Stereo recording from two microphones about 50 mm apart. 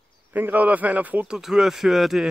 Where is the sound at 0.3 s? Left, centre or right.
Right.